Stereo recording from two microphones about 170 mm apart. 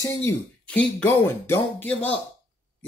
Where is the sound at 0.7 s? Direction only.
5° left (ahead or behind).